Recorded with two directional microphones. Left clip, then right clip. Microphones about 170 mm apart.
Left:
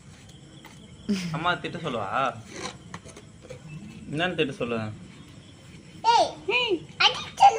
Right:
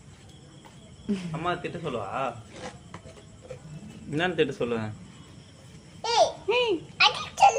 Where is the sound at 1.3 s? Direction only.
15° left (ahead or behind).